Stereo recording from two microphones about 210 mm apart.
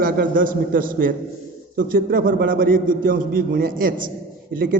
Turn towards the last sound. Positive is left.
turn(degrees=-45)  # may be behind; listen again after turning